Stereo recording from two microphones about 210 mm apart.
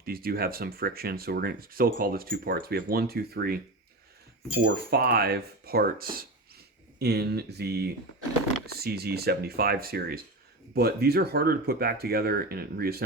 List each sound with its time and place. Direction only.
0.0 s speech: 45° right (ahead or behind)